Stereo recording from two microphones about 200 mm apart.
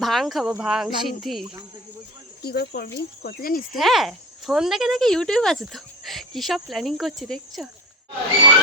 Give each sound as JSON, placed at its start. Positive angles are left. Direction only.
{"t": 0.0, "sound": "speech", "side_deg": 0}
{"t": 2.4, "sound": "speech", "side_deg": 50}
{"t": 3.8, "sound": "speech", "side_deg": 0}